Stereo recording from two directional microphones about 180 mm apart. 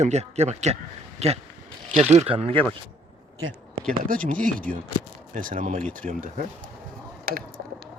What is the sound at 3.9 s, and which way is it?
A man's voice, 50° right (ahead or behind).